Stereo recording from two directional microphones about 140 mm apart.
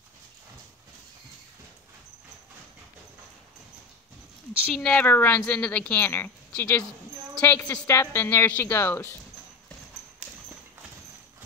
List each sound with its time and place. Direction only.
4.7 s a woman's voice: 10° left (ahead or behind)